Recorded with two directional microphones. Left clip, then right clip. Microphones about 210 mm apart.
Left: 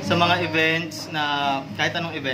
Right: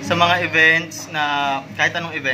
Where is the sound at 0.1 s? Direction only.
Centre (ahead or behind).